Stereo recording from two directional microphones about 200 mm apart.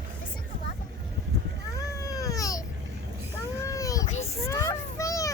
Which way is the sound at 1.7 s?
15° left (ahead or behind).